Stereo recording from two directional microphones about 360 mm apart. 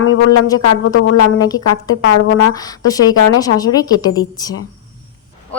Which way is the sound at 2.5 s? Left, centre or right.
Centre.